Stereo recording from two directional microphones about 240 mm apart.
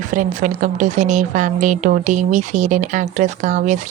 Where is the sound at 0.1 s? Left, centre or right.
Right.